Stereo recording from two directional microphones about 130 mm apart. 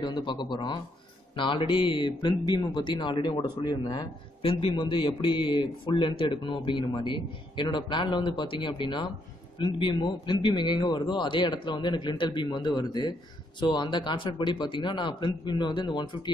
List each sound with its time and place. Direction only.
0.0 s speech: 35° left (ahead or behind)
4.4 s speech: 45° left (ahead or behind)